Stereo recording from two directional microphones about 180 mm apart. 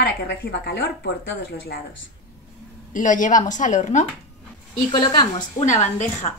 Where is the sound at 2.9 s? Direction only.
45° left (ahead or behind).